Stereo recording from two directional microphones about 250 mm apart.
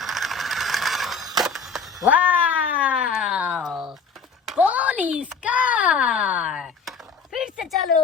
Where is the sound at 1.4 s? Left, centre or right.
Centre.